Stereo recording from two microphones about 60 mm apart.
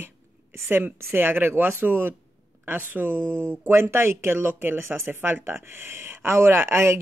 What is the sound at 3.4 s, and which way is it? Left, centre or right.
Speech, right.